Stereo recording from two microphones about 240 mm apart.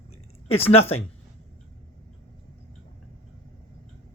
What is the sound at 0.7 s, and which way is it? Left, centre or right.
Speech, left.